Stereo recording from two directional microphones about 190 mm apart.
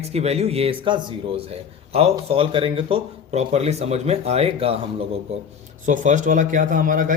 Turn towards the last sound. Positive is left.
turn(degrees=-45)  # may be behind; listen again after turning